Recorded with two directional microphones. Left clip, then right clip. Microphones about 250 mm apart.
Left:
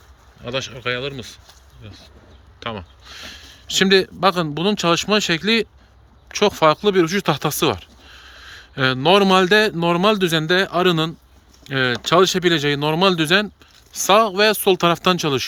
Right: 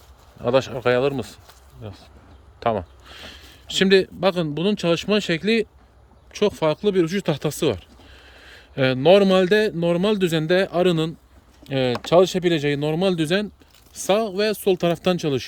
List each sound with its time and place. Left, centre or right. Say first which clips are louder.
0.4 s speech: right 5 dB; right; by 15.4 s centre